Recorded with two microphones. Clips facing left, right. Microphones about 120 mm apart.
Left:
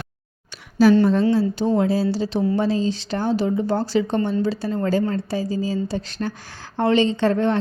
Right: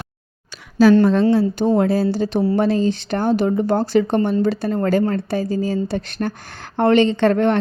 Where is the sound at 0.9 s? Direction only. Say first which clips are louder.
Right 3 dB; 75° right (ahead or behind).